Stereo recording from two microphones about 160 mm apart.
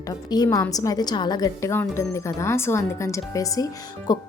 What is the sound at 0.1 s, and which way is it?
A woman's voice, 25° left (ahead or behind).